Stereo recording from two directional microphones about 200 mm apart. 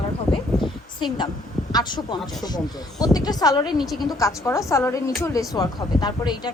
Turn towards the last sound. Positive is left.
turn(degrees=20)  # may be behind; listen again after turning